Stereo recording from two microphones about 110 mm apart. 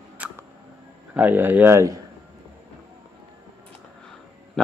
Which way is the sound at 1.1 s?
15° right (ahead or behind).